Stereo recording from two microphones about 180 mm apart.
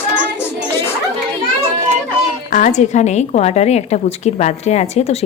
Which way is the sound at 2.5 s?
45° left (ahead or behind).